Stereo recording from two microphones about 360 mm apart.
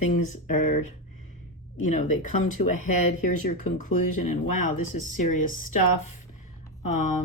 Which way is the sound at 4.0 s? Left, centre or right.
Left.